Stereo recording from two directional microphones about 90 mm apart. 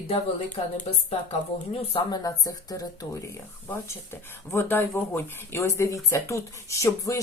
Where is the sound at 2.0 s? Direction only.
45° left (ahead or behind).